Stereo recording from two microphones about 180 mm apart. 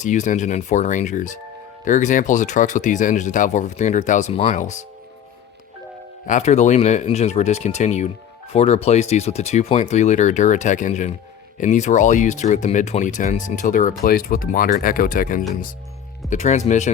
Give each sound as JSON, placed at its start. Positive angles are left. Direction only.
{"t": 0.0, "sound": "speech", "side_deg": 45}
{"t": 6.2, "sound": "speech", "side_deg": 40}